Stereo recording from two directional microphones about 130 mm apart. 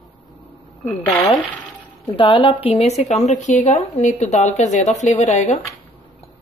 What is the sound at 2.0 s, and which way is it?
A woman's voice, 40° left (ahead or behind).